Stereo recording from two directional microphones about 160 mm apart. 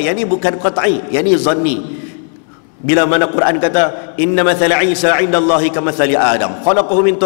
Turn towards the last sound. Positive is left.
turn(degrees=15)  # may be behind; listen again after turning